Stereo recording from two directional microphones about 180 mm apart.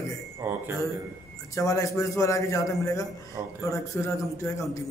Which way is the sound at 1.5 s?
20° left (ahead or behind).